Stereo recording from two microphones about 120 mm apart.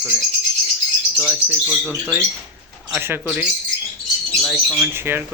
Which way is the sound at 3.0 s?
20° right (ahead or behind).